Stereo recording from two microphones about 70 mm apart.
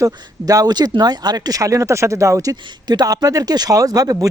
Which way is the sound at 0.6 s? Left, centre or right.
Right.